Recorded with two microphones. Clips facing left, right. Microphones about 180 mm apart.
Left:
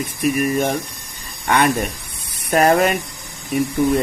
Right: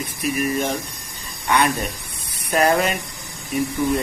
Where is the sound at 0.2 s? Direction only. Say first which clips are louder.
Left 4 dB; 50° left (ahead or behind).